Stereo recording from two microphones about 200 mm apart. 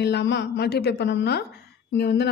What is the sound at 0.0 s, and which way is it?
A woman's voice, 60° left (ahead or behind).